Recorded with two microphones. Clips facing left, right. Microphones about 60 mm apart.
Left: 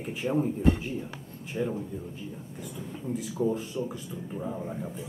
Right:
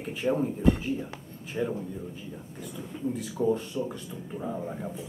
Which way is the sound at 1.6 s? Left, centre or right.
Centre.